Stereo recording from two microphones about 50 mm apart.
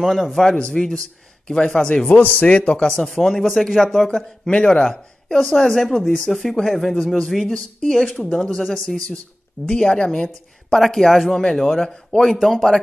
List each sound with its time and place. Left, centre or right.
0.0 s speech: centre
0.3 s speech: centre
2.1 s a man's voice: left
2.4 s speech: left
3.0 s speech: centre
4.1 s speech: centre
9.7 s speech: centre
12.3 s speech: centre